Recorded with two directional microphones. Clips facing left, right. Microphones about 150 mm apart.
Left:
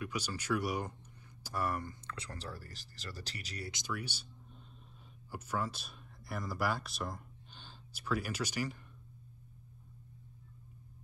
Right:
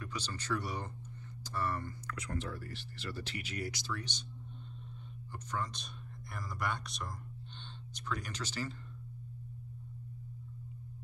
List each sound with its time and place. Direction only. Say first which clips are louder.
0.0 s speech: left 3 dB; 10° left (ahead or behind)
2.0 s speech: right 5 dB; 30° left (ahead or behind)
3.7 s speech: left 1 dB; 15° left (ahead or behind)
5.3 s speech: left 2 dB; 5° left (ahead or behind)